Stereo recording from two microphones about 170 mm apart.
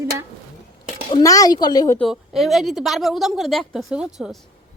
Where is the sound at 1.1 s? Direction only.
20° left (ahead or behind).